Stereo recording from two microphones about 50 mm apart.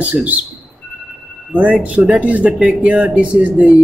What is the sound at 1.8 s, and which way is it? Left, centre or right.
A man's voice, right.